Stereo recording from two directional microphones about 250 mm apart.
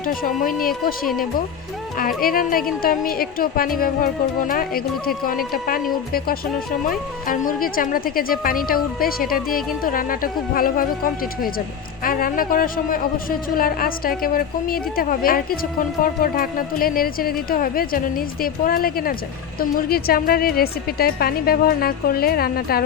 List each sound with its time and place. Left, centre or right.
0.0 s a woman's voice: left
2.0 s a woman's voice: left
7.3 s a woman's voice: left